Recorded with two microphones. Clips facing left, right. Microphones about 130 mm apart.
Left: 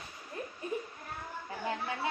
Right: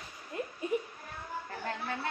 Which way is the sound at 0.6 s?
20° right (ahead or behind).